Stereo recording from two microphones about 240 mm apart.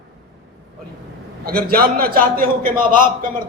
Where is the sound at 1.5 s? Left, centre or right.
Right.